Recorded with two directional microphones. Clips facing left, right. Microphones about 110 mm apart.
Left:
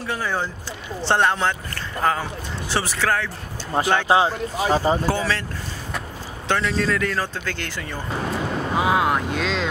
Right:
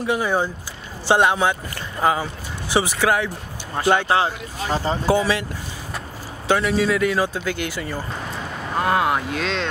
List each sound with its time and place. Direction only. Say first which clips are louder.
0.0 s a man's voice: right 5 dB; 15° right (ahead or behind)
4.1 s speech: left 2 dB; 15° left (ahead or behind)
5.0 s a man's voice: right 4 dB; 15° right (ahead or behind)
6.4 s a man's voice: right 3 dB; 10° right (ahead or behind)
8.7 s speech: right 1 dB; centre (ahead or behind)